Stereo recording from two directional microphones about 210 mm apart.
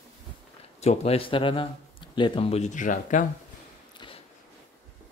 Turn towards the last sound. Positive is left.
turn(degrees=25)  # may be behind; listen again after turning